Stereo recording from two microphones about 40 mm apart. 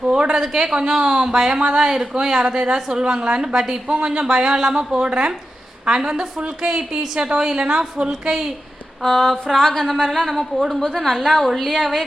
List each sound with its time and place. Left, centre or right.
0.1 s a sound: right
0.5 s a woman's voice: centre
9.0 s a woman's voice: centre